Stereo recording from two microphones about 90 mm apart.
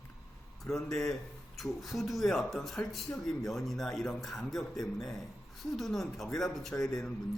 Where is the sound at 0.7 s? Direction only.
5° left (ahead or behind).